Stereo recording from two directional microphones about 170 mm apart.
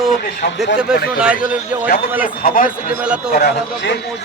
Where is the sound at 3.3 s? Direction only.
70° left (ahead or behind).